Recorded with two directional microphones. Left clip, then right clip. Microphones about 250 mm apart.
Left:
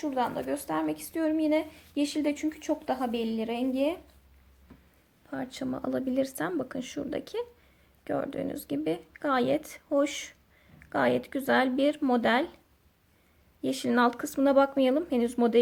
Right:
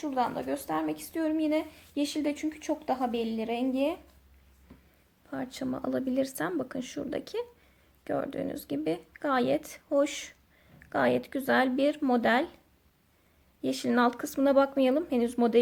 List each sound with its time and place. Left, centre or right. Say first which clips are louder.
0.0 s a woman's voice: even; centre
5.3 s a woman's voice: even; centre
13.6 s a woman's voice: left 1 dB; centre